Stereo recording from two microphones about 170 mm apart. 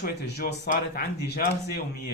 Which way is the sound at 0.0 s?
70° left (ahead or behind).